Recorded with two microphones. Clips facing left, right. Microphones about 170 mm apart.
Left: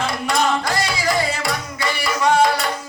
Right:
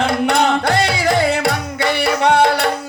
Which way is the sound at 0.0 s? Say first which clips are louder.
Right 5 dB; 60° right (ahead or behind).